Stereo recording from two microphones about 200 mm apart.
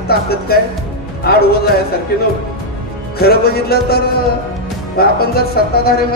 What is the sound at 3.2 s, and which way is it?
Speech, 50° left (ahead or behind).